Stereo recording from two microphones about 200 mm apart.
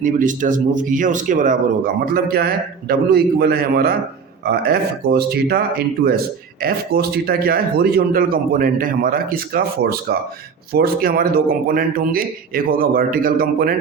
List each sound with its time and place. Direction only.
0.0 s speech: 40° right (ahead or behind)